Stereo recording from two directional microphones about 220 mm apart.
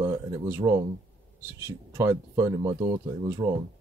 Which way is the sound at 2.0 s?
15° right (ahead or behind).